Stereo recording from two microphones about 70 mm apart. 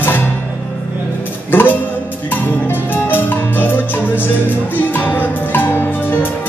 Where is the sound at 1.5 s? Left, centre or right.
Left.